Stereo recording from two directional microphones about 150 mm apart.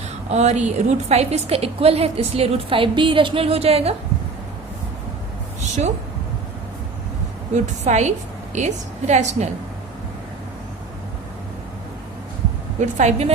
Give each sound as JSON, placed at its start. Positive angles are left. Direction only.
{"t": 0.3, "sound": "a woman's voice", "side_deg": -50}
{"t": 5.5, "sound": "a sound", "side_deg": -55}
{"t": 7.5, "sound": "a woman's voice", "side_deg": -50}
{"t": 12.8, "sound": "a woman's voice", "side_deg": -50}